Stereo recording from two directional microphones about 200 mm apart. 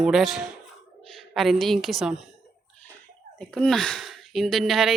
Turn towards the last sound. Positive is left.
turn(degrees=0)  # may be behind; listen again after turning